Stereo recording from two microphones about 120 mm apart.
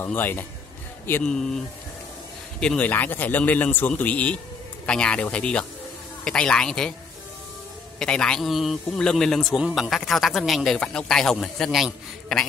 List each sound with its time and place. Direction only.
0.0 s a man's voice: 15° left (ahead or behind)
1.2 s speech: 5° left (ahead or behind)
2.6 s a man's voice: 10° left (ahead or behind)
8.0 s speech: 5° left (ahead or behind)